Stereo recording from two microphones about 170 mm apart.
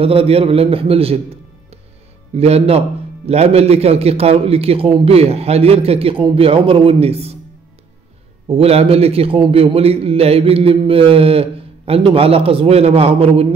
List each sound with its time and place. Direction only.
0.0 s a man's voice: 35° right (ahead or behind)
8.5 s a man's voice: 35° right (ahead or behind)